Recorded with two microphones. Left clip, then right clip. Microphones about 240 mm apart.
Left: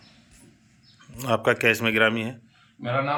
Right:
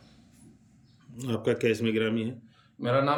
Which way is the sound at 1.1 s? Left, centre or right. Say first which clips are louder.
Left 7 dB; centre.